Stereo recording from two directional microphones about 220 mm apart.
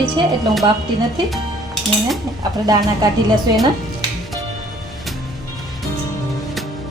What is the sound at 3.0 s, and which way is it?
Speech, 15° right (ahead or behind).